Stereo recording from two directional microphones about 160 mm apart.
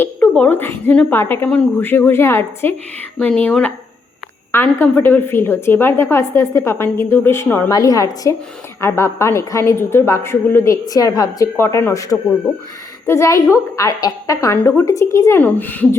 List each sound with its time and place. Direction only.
0.0 s a woman's voice: 10° left (ahead or behind)